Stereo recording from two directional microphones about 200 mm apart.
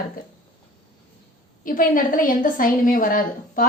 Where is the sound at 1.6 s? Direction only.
45° left (ahead or behind).